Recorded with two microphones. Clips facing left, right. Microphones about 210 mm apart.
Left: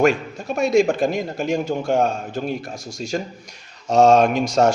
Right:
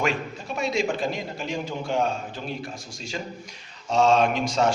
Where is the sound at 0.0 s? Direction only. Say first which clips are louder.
Left 9 dB; 50° left (ahead or behind).